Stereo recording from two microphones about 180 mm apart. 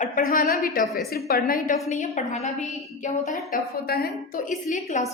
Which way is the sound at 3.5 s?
60° left (ahead or behind).